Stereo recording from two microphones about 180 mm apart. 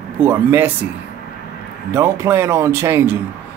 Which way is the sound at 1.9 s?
15° right (ahead or behind).